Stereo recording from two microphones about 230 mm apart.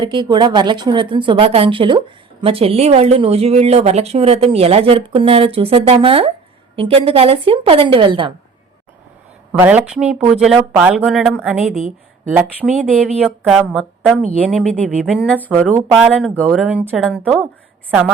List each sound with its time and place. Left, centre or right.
0.0 s a woman's voice: centre
9.5 s speech: centre